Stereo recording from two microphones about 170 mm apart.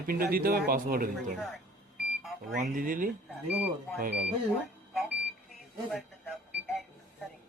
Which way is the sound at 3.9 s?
65° right (ahead or behind).